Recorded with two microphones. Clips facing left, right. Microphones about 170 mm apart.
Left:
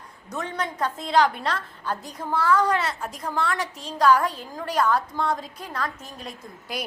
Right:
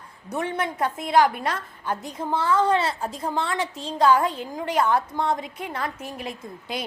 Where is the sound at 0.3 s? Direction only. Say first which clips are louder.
Right 3 dB; 25° right (ahead or behind).